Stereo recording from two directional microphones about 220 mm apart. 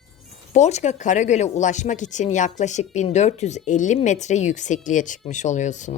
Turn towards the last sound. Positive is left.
turn(degrees=35)  # may be behind; listen again after turning